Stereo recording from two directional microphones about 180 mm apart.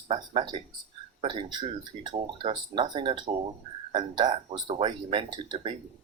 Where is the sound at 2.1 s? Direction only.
25° right (ahead or behind).